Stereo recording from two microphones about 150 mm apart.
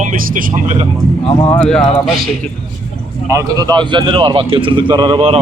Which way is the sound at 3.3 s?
25° right (ahead or behind).